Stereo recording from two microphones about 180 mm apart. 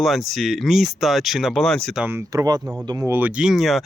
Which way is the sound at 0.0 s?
Centre (ahead or behind).